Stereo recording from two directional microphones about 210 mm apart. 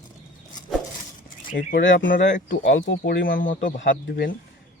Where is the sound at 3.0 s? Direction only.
45° left (ahead or behind).